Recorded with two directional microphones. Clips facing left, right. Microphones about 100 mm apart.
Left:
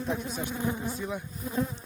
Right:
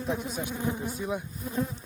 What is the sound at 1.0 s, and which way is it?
Speech, 15° right (ahead or behind).